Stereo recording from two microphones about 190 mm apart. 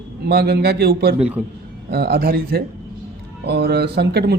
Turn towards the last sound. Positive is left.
turn(degrees=-55)  # may be behind; listen again after turning